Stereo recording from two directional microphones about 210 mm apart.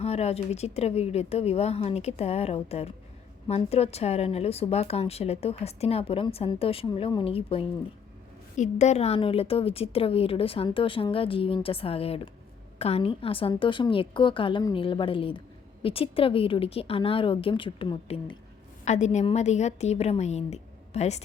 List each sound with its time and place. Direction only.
0.0 s a woman's voice: 30° left (ahead or behind)